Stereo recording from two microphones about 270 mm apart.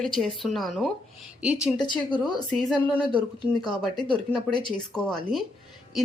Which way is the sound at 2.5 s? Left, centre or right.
Centre.